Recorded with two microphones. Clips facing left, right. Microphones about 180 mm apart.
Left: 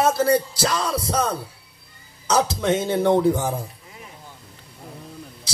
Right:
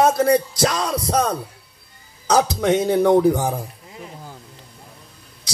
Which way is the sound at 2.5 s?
25° left (ahead or behind).